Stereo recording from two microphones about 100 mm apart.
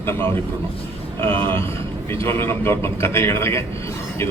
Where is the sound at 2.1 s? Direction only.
25° left (ahead or behind).